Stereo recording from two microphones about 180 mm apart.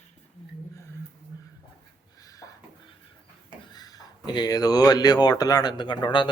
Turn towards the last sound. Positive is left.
turn(degrees=25)  # may be behind; listen again after turning